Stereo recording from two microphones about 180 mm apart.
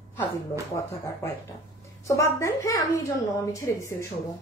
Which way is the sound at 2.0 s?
15° left (ahead or behind).